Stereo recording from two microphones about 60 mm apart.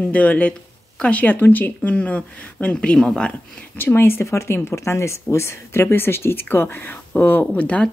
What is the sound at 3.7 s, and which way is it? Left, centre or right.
Speech, left.